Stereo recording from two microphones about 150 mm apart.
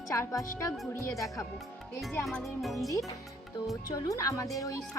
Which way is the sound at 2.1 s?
10° left (ahead or behind).